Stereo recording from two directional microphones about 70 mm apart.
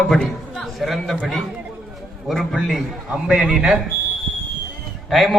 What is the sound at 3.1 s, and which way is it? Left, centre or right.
Speech, centre.